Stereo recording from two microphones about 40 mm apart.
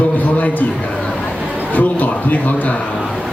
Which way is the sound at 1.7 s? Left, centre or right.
Left.